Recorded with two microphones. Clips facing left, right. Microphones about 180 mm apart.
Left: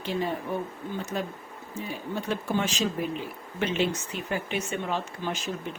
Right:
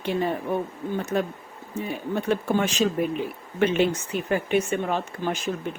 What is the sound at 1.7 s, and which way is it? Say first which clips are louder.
Speech: right 5 dB; 55° right (ahead or behind).